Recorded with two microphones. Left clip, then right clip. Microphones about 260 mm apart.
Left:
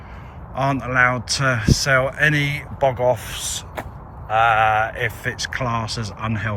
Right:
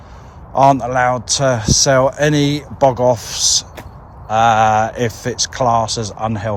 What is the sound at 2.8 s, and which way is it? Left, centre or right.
Speech, right.